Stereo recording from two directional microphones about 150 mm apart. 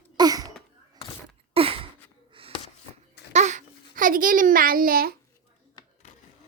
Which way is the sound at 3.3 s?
50° right (ahead or behind).